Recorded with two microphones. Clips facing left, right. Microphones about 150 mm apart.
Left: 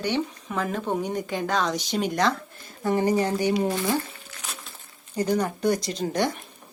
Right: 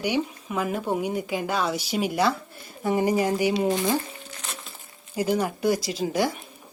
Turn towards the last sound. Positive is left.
turn(degrees=-5)  # may be behind; listen again after turning